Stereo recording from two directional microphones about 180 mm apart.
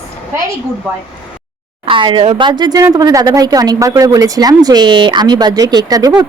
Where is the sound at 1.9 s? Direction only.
25° right (ahead or behind).